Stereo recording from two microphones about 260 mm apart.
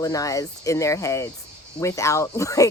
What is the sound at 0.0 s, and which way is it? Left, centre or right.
Speech, centre.